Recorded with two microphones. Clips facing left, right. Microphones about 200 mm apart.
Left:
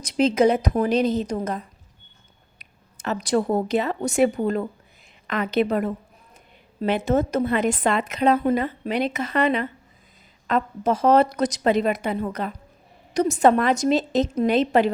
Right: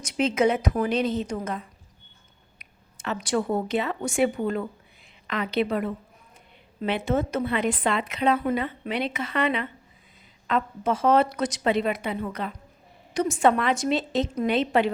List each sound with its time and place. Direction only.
0.0 s a woman's voice: 35° left (ahead or behind)